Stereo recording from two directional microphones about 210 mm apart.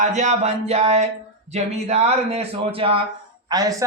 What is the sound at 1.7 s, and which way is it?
Speech, 30° right (ahead or behind).